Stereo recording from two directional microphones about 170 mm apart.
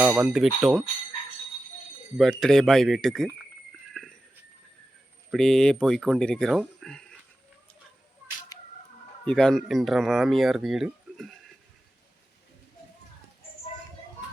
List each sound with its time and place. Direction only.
0.0 s speech: 5° right (ahead or behind)
2.1 s speech: centre (ahead or behind)
3.9 s a sound: centre (ahead or behind)
5.3 s speech: 5° left (ahead or behind)
8.5 s music: 20° left (ahead or behind)
9.2 s speech: 5° left (ahead or behind)